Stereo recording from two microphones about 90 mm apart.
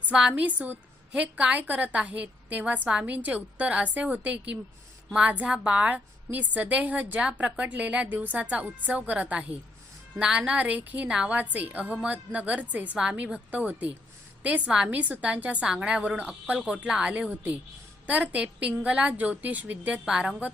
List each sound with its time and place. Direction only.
0.1 s a woman's voice: 10° right (ahead or behind)
20.1 s a woman's voice: 5° right (ahead or behind)